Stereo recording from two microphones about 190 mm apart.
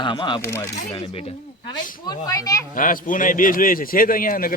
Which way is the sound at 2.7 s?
45° left (ahead or behind).